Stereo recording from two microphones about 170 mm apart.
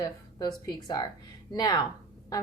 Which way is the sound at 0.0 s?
25° left (ahead or behind).